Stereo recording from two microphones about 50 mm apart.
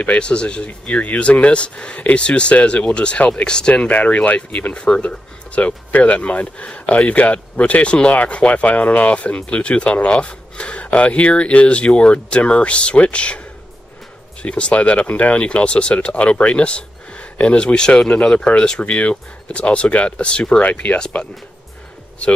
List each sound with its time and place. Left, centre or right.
0.2 s speech: left
14.4 s speech: left
21.1 s speech: left